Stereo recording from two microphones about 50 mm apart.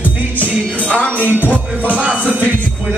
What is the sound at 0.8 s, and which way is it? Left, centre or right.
Music, left.